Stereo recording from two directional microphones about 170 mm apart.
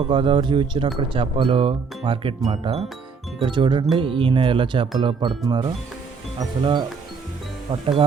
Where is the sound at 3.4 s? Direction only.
25° right (ahead or behind).